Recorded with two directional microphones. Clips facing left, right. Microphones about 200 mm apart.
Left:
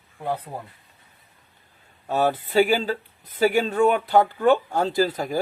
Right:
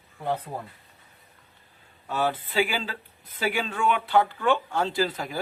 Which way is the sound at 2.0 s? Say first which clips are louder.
Left 5 dB; 40° left (ahead or behind).